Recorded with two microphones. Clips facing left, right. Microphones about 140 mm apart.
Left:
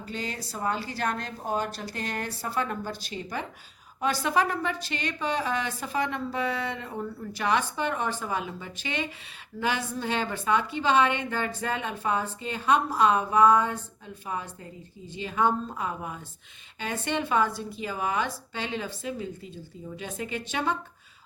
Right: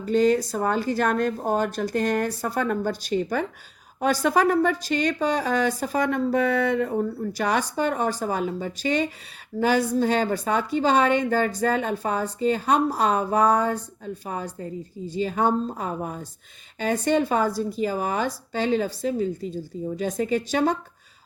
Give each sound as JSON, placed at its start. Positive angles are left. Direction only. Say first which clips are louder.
{"t": 0.0, "sound": "speech", "louder": "right 16 dB", "side_deg": -45}
{"t": 7.1, "sound": "a woman's voice", "louder": "right 3 dB", "side_deg": -40}